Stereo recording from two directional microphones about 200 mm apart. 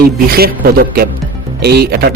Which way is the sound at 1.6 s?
50° right (ahead or behind).